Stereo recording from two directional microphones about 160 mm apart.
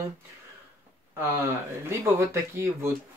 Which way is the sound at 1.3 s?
20° right (ahead or behind).